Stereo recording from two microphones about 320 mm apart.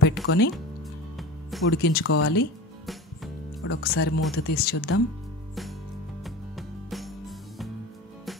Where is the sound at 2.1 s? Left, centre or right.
Left.